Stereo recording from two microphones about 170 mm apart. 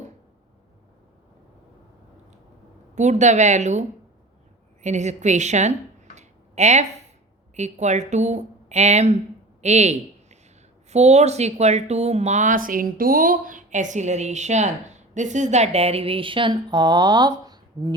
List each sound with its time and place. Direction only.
2.9 s a woman's voice: 45° right (ahead or behind)
6.1 s a sound: 40° right (ahead or behind)
7.5 s a woman's voice: 45° right (ahead or behind); by 17.9 s 25° right (ahead or behind)